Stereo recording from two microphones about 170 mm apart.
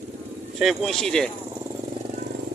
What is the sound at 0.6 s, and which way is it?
Speech, centre (ahead or behind).